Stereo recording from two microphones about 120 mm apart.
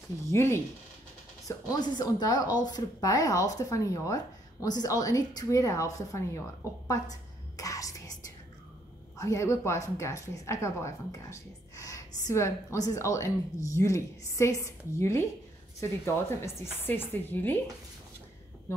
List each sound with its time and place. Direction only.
0.3 s speech: 20° left (ahead or behind)
1.7 s speech: 35° left (ahead or behind)
6.9 s a sound: 30° left (ahead or behind)
9.2 s speech: 25° left (ahead or behind)